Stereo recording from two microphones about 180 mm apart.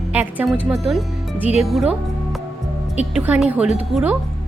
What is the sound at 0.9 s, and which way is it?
Music, centre (ahead or behind).